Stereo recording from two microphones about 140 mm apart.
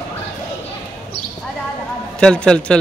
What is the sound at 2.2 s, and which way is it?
Speech, 5° left (ahead or behind).